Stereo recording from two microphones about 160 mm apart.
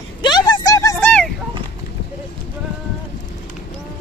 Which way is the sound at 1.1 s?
5° left (ahead or behind).